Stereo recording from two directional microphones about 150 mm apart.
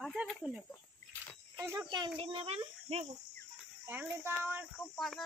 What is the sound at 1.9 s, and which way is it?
Speech, 35° right (ahead or behind).